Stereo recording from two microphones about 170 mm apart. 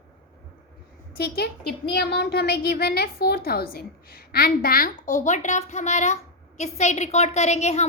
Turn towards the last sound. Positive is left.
turn(degrees=40)  # may be behind; listen again after turning